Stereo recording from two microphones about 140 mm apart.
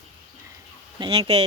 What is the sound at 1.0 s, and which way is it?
Speech, 40° right (ahead or behind).